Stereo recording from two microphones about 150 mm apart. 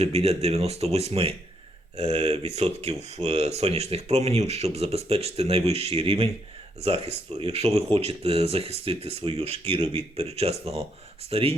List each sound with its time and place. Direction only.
0.0 s speech: 45° right (ahead or behind)